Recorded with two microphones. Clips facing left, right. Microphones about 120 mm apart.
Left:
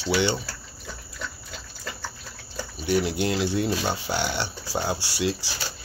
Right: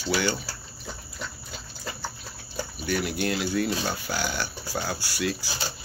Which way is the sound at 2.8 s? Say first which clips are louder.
Left 4 dB; 25° left (ahead or behind).